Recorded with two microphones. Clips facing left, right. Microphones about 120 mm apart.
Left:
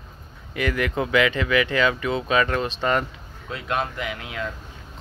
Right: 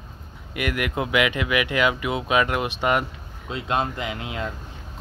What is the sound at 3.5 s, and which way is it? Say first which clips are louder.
Speech: right 2 dB; 25° right (ahead or behind).